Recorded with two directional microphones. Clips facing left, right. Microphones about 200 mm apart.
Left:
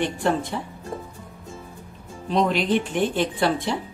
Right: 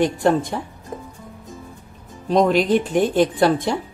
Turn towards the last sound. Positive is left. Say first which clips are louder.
# right 5 dB
turn(degrees=-45)  # may be behind; listen again after turning